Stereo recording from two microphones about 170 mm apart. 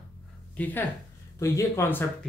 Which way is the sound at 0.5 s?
10° left (ahead or behind).